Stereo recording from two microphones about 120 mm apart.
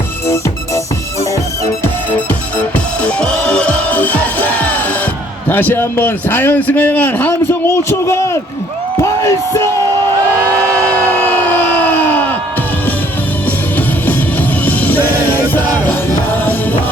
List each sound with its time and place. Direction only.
2.7 s music: 10° left (ahead or behind)
5.5 s a man's voice: 15° left (ahead or behind)
9.0 s music: 25° left (ahead or behind)
10.8 s a sound: 15° left (ahead or behind)
14.6 s music: 15° left (ahead or behind)